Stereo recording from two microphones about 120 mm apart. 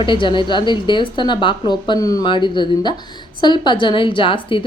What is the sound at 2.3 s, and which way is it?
A woman's voice, 40° left (ahead or behind).